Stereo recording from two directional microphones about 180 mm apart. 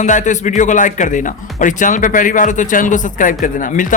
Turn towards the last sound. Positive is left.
turn(degrees=45)  # may be behind; listen again after turning